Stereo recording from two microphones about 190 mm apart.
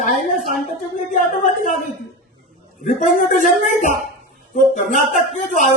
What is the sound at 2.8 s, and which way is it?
Speech, 40° left (ahead or behind).